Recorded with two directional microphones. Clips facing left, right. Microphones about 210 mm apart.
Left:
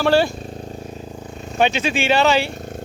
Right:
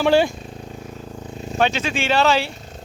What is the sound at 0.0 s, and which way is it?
Speech, 15° right (ahead or behind).